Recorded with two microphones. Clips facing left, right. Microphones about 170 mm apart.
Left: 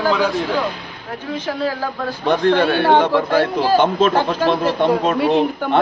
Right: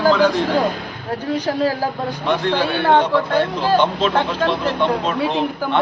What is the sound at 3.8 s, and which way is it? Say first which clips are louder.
A man's voice: left 2 dB; 45° left (ahead or behind).